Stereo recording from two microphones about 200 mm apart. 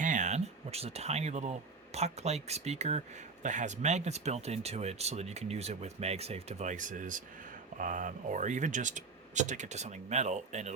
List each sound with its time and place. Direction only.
0.0 s speech: 40° right (ahead or behind)